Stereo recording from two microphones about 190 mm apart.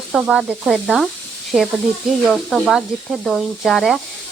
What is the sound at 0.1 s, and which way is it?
Speech, 5° right (ahead or behind).